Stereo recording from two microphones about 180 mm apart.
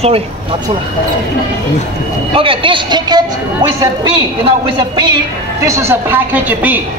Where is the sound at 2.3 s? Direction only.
30° right (ahead or behind).